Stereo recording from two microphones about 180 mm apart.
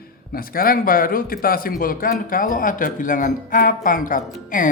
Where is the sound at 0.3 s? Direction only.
55° left (ahead or behind).